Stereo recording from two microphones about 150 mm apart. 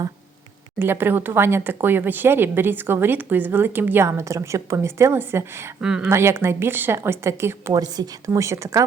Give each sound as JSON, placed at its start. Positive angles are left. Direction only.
{"t": 0.8, "sound": "speech", "side_deg": -15}
{"t": 5.8, "sound": "speech", "side_deg": -5}
{"t": 6.1, "sound": "speech", "side_deg": -15}